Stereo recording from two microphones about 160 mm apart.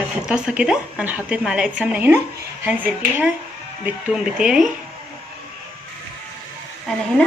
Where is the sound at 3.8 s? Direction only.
5° right (ahead or behind).